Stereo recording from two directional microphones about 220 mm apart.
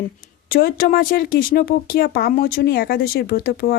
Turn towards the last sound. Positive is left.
turn(degrees=45)  # may be behind; listen again after turning